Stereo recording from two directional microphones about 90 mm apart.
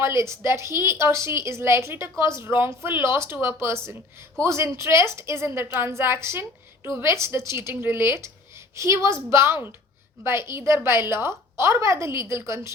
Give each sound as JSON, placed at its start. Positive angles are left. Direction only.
{"t": 0.0, "sound": "speech", "side_deg": -30}